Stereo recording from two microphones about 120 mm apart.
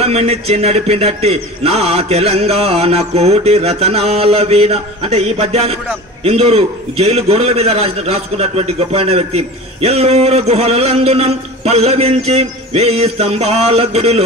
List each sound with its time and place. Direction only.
0.0 s a man's voice: 60° right (ahead or behind)